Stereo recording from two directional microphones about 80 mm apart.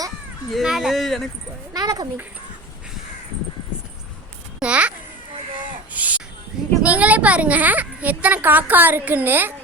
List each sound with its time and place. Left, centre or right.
0.5 s speech: centre
1.7 s speech: right
4.6 s a child's voice: centre
5.9 s a sound: centre
6.8 s a woman's voice: centre